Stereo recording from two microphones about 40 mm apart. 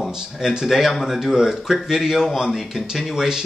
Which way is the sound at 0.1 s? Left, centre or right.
Centre.